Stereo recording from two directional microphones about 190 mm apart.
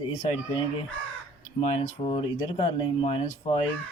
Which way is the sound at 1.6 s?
30° left (ahead or behind).